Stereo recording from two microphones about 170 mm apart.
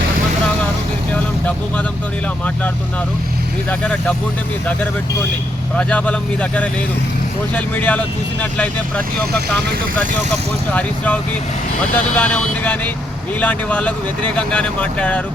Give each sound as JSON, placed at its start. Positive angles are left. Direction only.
{"t": 3.7, "sound": "speech", "side_deg": 10}
{"t": 5.7, "sound": "speech", "side_deg": 10}
{"t": 10.7, "sound": "speech", "side_deg": 10}